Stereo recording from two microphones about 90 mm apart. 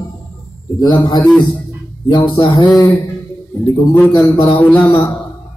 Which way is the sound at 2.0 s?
60° left (ahead or behind).